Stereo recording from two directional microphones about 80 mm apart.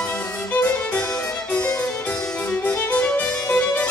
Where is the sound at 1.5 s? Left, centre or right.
Centre.